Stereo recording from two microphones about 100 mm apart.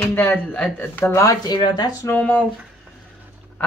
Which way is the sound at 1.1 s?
35° left (ahead or behind).